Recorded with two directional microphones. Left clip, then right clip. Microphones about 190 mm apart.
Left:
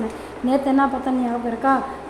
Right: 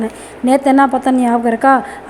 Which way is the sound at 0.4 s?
30° right (ahead or behind).